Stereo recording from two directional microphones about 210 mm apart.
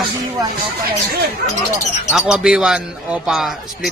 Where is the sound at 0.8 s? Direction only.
50° right (ahead or behind).